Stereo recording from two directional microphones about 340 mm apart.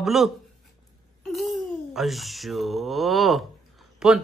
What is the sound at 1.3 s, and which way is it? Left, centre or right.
Speech, centre.